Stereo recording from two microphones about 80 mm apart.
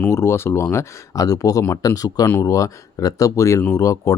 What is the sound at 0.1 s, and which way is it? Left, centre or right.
Speech, left.